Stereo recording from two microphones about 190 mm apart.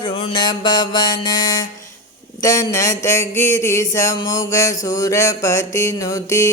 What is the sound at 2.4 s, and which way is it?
Music, 15° left (ahead or behind).